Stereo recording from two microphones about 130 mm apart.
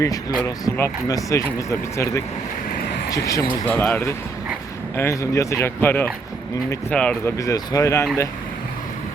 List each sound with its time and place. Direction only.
0.0 s speech: 30° left (ahead or behind)
3.7 s speech: 10° left (ahead or behind)
7.3 s speech: 25° left (ahead or behind)